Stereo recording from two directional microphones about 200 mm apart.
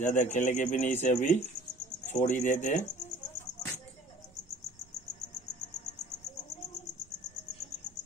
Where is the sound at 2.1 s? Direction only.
35° left (ahead or behind).